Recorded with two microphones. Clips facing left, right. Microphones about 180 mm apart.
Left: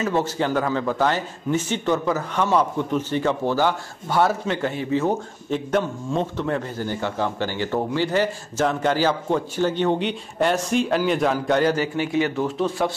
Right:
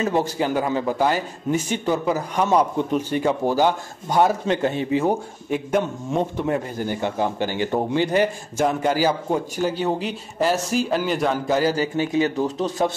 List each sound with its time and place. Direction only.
0.1 s a man's voice: 15° right (ahead or behind)
12.4 s a man's voice: 40° right (ahead or behind)